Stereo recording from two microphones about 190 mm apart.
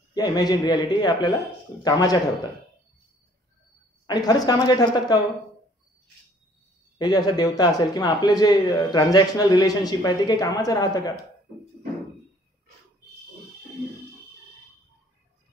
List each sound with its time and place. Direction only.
0.1 s speech: 20° left (ahead or behind)
4.1 s speech: 20° left (ahead or behind)
7.0 s speech: 20° left (ahead or behind)